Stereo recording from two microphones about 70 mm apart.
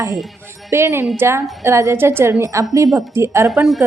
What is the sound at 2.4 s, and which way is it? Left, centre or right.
A woman's voice, right.